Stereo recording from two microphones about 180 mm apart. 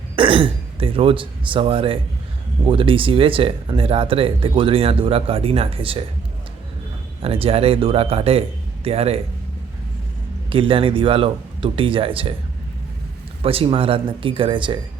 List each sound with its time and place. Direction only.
0.2 s speech: 30° right (ahead or behind)
7.2 s speech: 30° right (ahead or behind)
10.5 s speech: 30° right (ahead or behind)
13.4 s speech: 30° right (ahead or behind)